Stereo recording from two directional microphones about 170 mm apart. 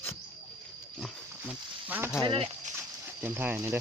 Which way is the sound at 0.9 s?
5° right (ahead or behind).